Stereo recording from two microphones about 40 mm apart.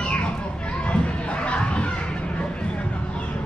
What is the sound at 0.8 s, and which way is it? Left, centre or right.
Crowd, left.